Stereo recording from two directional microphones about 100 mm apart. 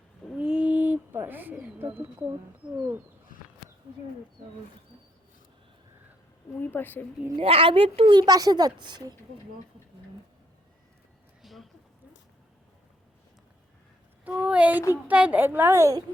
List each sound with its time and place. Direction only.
0.3 s bird: 10° right (ahead or behind)
6.6 s speech: 20° left (ahead or behind)
7.3 s a child's voice: 65° right (ahead or behind)
8.1 s speech: 40° right (ahead or behind)
11.4 s a sound: centre (ahead or behind)
14.3 s a woman's voice: 15° right (ahead or behind); by 16.0 s 35° right (ahead or behind)